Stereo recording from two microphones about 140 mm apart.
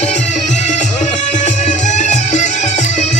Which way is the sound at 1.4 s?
55° left (ahead or behind).